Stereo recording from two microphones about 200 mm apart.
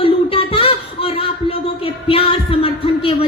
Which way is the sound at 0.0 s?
30° left (ahead or behind).